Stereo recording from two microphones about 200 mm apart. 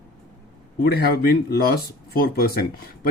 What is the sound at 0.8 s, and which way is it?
Speech, 50° left (ahead or behind).